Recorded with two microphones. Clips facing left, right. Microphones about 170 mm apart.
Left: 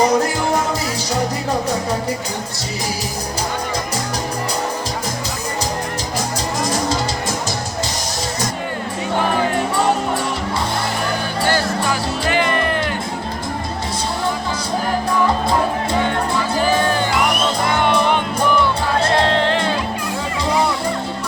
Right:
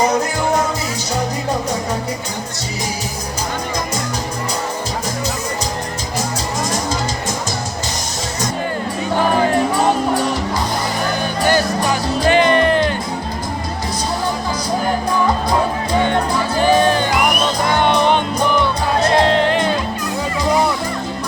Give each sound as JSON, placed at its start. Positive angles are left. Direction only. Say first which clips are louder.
{"t": 12.2, "sound": "music", "louder": "right 7 dB", "side_deg": -25}
{"t": 16.7, "sound": "music", "louder": "right 3 dB", "side_deg": -25}
{"t": 19.1, "sound": "music", "louder": "right 3 dB", "side_deg": -15}